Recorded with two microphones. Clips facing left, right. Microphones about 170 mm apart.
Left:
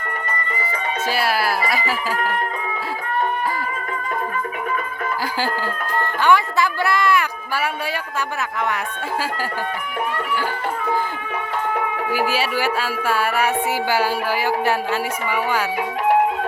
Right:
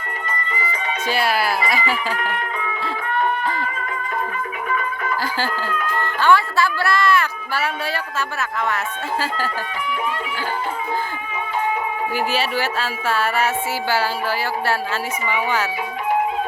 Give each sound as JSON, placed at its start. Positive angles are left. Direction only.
{"t": 1.1, "sound": "speech", "side_deg": 5}
{"t": 6.2, "sound": "music", "side_deg": 15}
{"t": 12.1, "sound": "music", "side_deg": 10}
{"t": 15.3, "sound": "music", "side_deg": 10}